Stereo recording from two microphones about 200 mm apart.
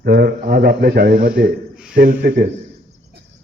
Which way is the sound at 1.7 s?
5° right (ahead or behind).